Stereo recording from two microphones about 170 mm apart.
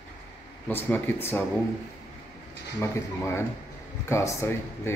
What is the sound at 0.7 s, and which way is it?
Speech, 10° left (ahead or behind).